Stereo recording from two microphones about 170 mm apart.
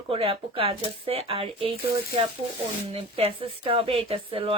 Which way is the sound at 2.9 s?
35° right (ahead or behind).